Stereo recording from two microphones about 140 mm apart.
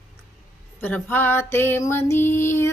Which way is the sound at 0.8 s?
10° left (ahead or behind).